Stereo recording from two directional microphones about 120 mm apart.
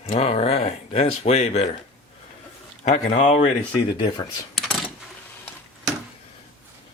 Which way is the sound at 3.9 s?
40° left (ahead or behind).